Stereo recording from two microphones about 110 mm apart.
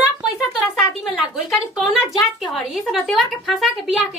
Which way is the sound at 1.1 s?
Centre (ahead or behind).